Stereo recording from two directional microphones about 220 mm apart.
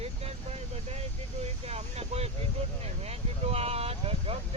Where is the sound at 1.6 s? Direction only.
30° right (ahead or behind).